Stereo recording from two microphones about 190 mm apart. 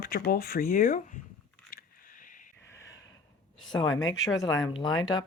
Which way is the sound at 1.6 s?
50° left (ahead or behind).